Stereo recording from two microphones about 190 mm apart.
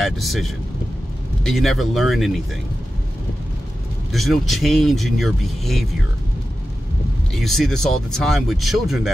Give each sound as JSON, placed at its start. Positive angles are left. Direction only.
{"t": 0.0, "sound": "speech", "side_deg": 0}
{"t": 4.1, "sound": "speech", "side_deg": 0}
{"t": 7.3, "sound": "speech", "side_deg": 0}